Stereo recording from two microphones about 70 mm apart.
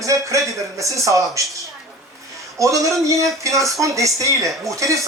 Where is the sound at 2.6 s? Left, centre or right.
Right.